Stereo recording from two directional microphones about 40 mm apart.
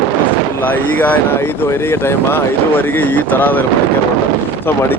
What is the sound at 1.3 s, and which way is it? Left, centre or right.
Speech, left.